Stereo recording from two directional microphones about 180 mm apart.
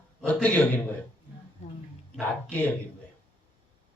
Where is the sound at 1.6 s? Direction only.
40° left (ahead or behind).